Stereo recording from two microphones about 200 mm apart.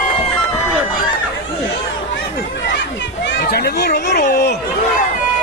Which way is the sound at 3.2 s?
60° left (ahead or behind).